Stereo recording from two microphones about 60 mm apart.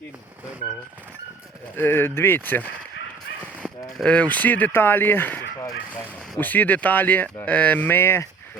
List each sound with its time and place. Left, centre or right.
1.7 s speech: left
4.0 s speech: left
6.4 s speech: left
7.9 s speech: left